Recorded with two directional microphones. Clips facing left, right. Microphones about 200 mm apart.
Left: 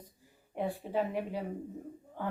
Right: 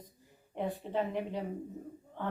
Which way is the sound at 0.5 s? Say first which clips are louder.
Left 1 dB; 10° left (ahead or behind).